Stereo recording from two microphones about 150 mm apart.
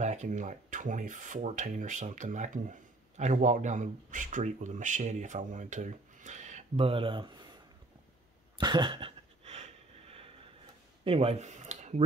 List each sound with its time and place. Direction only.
0.0 s speech: 50° right (ahead or behind)
6.9 s speech: 35° right (ahead or behind)
8.5 s cough: 30° right (ahead or behind); by 9.7 s 45° right (ahead or behind)
11.1 s speech: 40° right (ahead or behind)